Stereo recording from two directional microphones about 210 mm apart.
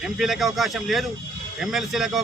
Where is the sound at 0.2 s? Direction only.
Centre (ahead or behind).